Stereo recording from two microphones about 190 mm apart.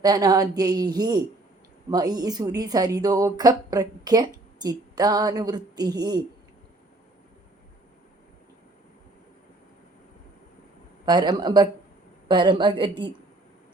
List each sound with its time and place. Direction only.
0.0 s a woman's voice: 20° right (ahead or behind)
11.0 s a woman's voice: 20° right (ahead or behind)